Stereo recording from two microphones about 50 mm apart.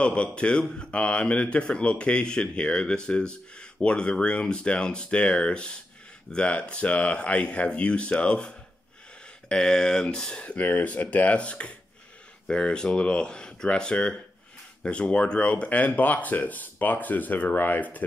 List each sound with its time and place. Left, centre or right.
0.0 s speech: left
10.4 s speech: left